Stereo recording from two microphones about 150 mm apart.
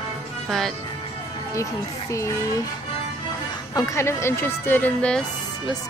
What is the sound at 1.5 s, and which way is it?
Speech, 20° left (ahead or behind).